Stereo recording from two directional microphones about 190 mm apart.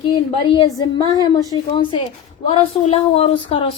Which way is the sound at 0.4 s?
20° left (ahead or behind).